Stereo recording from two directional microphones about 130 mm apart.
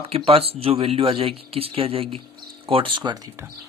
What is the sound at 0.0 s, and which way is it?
Speech, 50° right (ahead or behind).